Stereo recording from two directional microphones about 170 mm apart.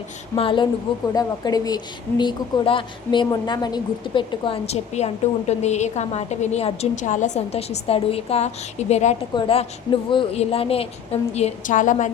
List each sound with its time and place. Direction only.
0.3 s a woman's voice: 30° left (ahead or behind); by 12.1 s 45° left (ahead or behind)